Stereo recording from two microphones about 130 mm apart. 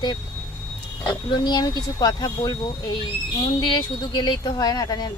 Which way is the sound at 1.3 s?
35° left (ahead or behind).